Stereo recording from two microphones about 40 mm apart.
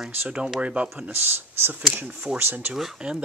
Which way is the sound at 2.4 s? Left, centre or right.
Right.